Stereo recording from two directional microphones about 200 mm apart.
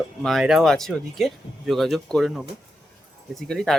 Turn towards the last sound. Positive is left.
turn(degrees=0)  # may be behind; listen again after turning